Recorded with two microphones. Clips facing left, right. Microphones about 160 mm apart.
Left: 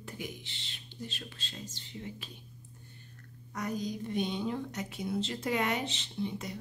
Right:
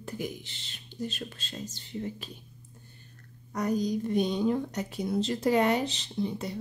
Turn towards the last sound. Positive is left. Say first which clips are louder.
# right 4 dB
turn(degrees=-35)  # may be behind; listen again after turning